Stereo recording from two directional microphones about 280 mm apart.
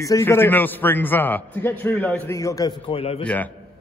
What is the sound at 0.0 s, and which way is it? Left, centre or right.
A man's voice, centre.